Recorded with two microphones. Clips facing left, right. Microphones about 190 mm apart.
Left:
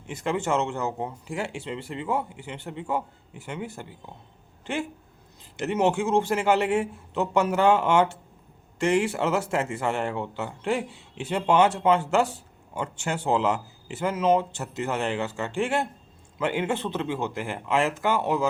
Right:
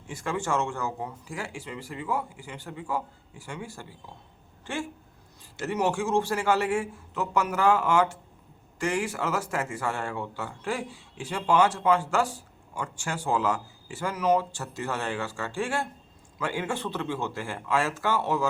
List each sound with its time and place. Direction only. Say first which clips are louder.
0.1 s speech: left 3 dB; 20° left (ahead or behind)